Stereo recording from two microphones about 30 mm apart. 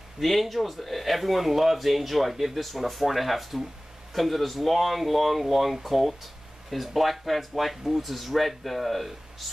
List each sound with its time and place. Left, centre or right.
0.2 s speech: centre